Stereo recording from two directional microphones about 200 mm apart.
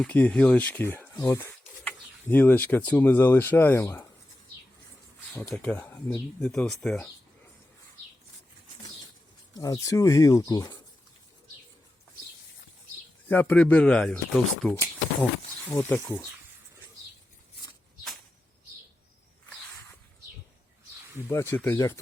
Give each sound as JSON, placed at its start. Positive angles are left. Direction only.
{"t": 0.0, "sound": "speech", "side_deg": 5}
{"t": 5.3, "sound": "speech", "side_deg": 5}
{"t": 9.6, "sound": "speech", "side_deg": 15}
{"t": 13.2, "sound": "speech", "side_deg": 10}
{"t": 15.7, "sound": "speech", "side_deg": 10}
{"t": 21.2, "sound": "speech", "side_deg": 10}